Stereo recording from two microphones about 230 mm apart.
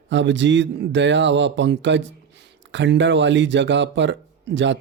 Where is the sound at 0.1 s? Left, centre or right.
Right.